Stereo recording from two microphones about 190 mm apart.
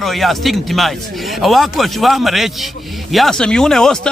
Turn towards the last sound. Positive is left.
turn(degrees=5)  # may be behind; listen again after turning